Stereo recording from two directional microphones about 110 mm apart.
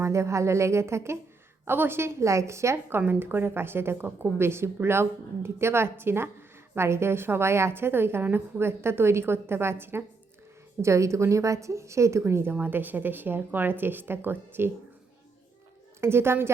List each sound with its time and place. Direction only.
0.0 s a woman's voice: 25° right (ahead or behind)
16.0 s a woman's voice: 20° right (ahead or behind)